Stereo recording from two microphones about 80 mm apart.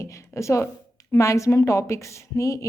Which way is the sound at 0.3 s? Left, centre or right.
Left.